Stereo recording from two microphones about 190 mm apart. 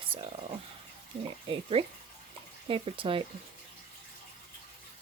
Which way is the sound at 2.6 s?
25° right (ahead or behind).